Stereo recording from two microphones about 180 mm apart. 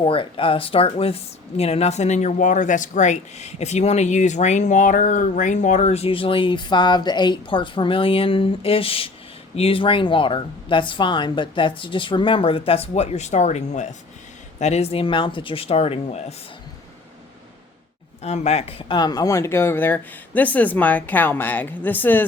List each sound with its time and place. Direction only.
0.0 s speech: 30° left (ahead or behind)
18.2 s speech: 40° left (ahead or behind); by 22.2 s 10° left (ahead or behind)